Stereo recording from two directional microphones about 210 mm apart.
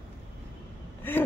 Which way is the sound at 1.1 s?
10° left (ahead or behind).